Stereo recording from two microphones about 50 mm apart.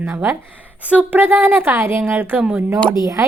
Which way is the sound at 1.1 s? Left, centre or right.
Right.